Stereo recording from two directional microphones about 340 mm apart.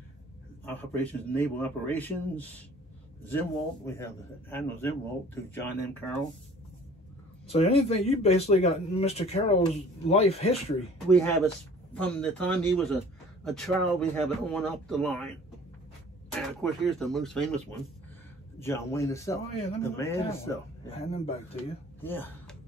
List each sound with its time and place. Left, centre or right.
0.7 s a man's voice: centre
7.4 s speech: centre
11.1 s a man's voice: centre
16.3 s a man's voice: centre